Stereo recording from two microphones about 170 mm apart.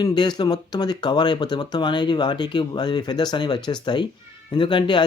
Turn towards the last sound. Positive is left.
turn(degrees=25)  # may be behind; listen again after turning